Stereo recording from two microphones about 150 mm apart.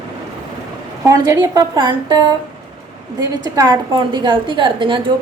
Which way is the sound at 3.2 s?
25° right (ahead or behind).